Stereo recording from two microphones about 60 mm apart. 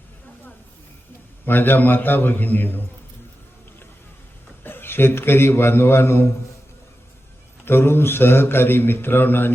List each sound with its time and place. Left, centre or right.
1.5 s a man's voice: left
4.6 s a man's voice: left
7.6 s a man's voice: left